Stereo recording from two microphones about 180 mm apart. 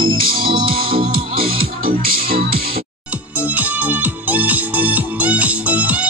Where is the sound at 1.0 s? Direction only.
55° right (ahead or behind).